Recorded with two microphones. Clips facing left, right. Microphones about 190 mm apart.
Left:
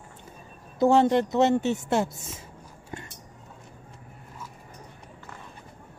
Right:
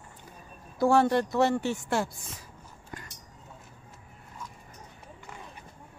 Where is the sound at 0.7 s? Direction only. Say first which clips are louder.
Left 3 dB; 20° left (ahead or behind).